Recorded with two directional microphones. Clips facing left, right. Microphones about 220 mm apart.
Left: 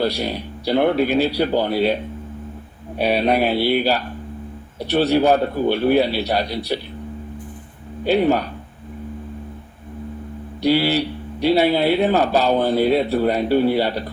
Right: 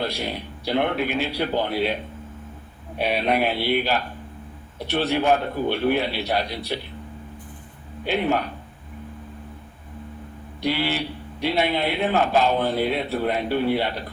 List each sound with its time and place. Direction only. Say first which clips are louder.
0.0 s speech: left 6 dB; 35° left (ahead or behind)
3.0 s speech: left 4 dB; 35° left (ahead or behind)
8.0 s speech: left 6 dB; 35° left (ahead or behind)
10.6 s speech: left 7 dB; 35° left (ahead or behind)